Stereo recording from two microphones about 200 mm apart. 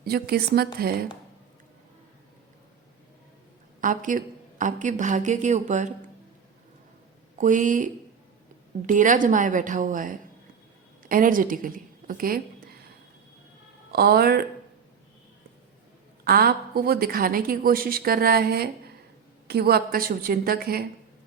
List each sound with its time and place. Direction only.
0.0 s a woman's voice: 50° right (ahead or behind)
3.8 s a woman's voice: 40° right (ahead or behind)
7.3 s a woman's voice: 40° right (ahead or behind)
8.9 s a woman's voice: 40° right (ahead or behind)
13.9 s a woman's voice: 50° right (ahead or behind)
16.2 s a woman's voice: 50° right (ahead or behind)